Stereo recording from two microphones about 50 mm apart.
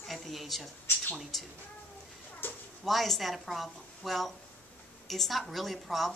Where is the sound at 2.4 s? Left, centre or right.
Left.